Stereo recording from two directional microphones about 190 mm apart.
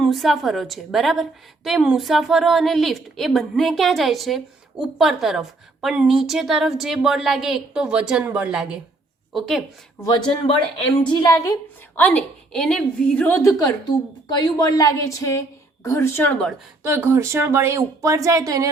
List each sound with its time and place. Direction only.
0.0 s a woman's voice: centre (ahead or behind)
10.0 s a woman's voice: 20° left (ahead or behind); by 16.6 s 5° left (ahead or behind)
16.8 s speech: 15° right (ahead or behind)